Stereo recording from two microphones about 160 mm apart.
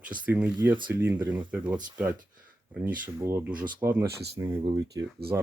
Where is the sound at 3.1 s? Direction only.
15° right (ahead or behind).